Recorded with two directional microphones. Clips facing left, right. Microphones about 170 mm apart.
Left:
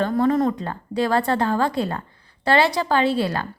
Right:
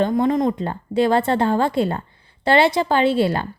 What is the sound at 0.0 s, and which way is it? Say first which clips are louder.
Speech: right 1 dB; 15° right (ahead or behind).